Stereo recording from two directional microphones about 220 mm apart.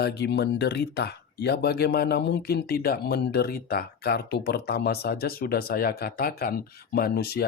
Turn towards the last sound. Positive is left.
turn(degrees=45)  # may be behind; listen again after turning